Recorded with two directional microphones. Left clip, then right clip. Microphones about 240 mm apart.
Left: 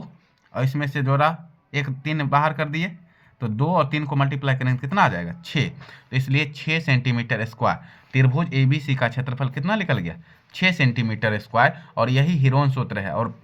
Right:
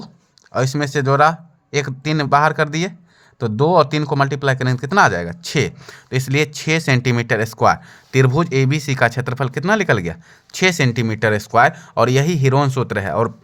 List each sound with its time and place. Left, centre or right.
0.5 s speech: right